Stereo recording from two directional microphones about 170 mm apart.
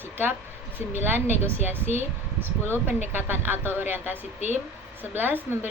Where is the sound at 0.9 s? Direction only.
10° right (ahead or behind).